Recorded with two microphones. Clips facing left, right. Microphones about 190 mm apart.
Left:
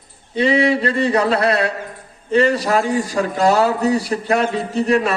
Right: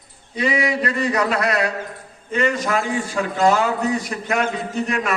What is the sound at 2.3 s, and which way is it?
A man's voice, 35° left (ahead or behind).